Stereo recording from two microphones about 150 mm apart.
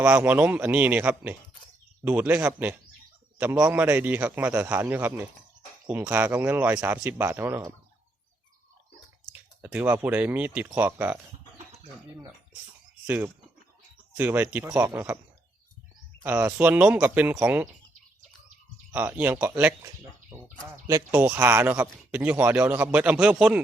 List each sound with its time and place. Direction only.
0.0 s a man's voice: 10° right (ahead or behind)
9.3 s speech: 10° right (ahead or behind)
13.1 s a man's voice: 10° right (ahead or behind)
16.2 s a man's voice: 10° right (ahead or behind)
18.9 s a man's voice: 10° right (ahead or behind)